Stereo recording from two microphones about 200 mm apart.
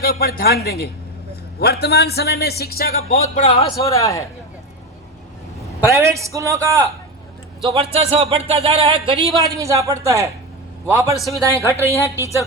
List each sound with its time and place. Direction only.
0.0 s a man's voice: 50° left (ahead or behind)
3.4 s a man's voice: 30° left (ahead or behind)
3.8 s a man's voice: 15° left (ahead or behind)
5.9 s speech: 15° right (ahead or behind)
7.6 s speech: 30° right (ahead or behind)